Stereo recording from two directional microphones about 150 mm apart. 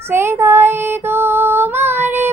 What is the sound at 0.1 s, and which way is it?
Child singing, 15° right (ahead or behind).